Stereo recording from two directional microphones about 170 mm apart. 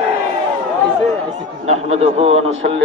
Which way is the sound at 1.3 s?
40° right (ahead or behind).